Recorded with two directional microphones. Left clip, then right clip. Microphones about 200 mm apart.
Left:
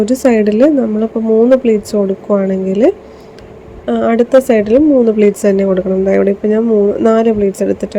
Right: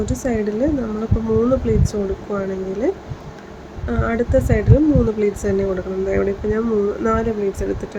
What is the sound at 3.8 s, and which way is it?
Speech, 30° left (ahead or behind).